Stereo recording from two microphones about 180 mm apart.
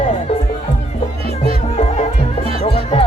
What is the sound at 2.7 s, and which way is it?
Music, 30° left (ahead or behind).